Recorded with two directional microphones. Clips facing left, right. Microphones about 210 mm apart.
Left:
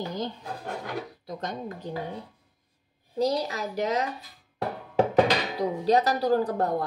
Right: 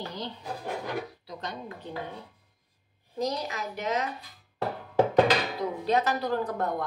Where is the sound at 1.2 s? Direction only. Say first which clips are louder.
Left 4 dB; 45° left (ahead or behind).